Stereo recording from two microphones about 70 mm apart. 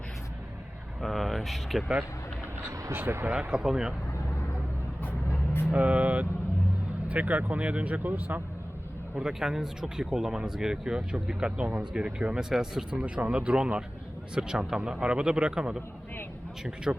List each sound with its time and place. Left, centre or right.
1.0 s speech: centre
2.9 s speech: right
3.3 s speech: centre
5.7 s speech: right
9.1 s speech: centre
13.0 s speech: centre